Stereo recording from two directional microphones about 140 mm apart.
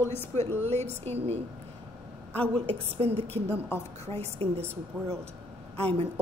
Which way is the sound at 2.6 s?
45° right (ahead or behind).